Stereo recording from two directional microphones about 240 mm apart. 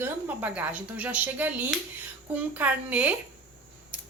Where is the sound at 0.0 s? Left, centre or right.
Centre.